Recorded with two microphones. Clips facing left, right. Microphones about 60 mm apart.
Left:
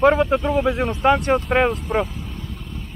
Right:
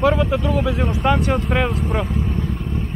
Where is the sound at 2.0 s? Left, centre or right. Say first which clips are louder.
Right 10 dB; right.